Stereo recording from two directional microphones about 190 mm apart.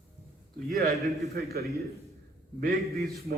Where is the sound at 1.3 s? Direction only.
55° right (ahead or behind).